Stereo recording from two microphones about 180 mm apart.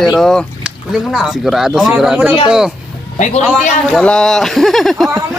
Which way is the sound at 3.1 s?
45° left (ahead or behind).